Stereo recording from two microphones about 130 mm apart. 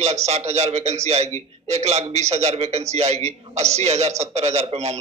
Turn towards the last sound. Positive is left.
turn(degrees=-55)  # may be behind; listen again after turning